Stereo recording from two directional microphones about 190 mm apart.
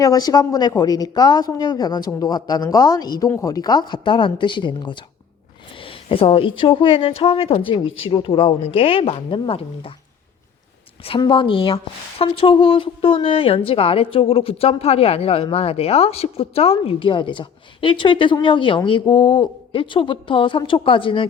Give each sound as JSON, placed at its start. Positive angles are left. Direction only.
{"t": 0.0, "sound": "a woman's voice", "side_deg": 20}
{"t": 11.0, "sound": "a woman's voice", "side_deg": 25}